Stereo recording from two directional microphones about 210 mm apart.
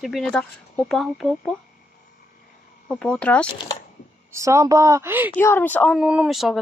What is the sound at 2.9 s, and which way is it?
Speech, 5° left (ahead or behind).